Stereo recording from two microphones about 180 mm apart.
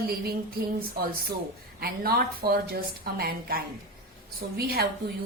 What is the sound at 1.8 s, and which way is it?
A woman's voice, 55° right (ahead or behind).